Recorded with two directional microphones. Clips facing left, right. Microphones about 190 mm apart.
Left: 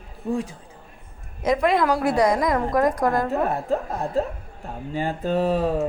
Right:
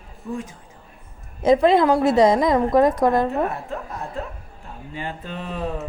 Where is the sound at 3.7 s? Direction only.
35° left (ahead or behind).